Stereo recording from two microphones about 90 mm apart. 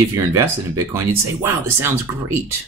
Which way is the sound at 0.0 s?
30° right (ahead or behind).